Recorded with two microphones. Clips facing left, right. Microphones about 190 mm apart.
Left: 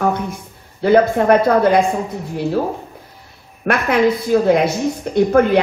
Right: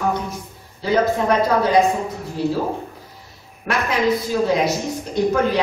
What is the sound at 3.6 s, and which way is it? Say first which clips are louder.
Speech: left 5 dB; 60° left (ahead or behind).